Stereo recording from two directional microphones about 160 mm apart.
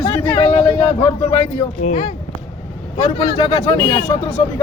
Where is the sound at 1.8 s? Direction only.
45° left (ahead or behind).